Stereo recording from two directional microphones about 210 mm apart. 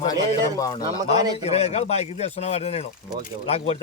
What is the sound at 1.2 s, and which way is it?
Speech, 20° right (ahead or behind).